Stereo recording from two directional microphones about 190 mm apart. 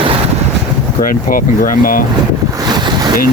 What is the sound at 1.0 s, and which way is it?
Speech, 45° left (ahead or behind).